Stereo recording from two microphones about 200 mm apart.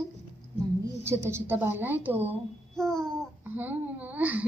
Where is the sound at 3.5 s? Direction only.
10° right (ahead or behind).